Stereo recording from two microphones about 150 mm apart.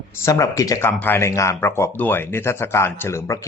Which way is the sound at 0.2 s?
20° left (ahead or behind).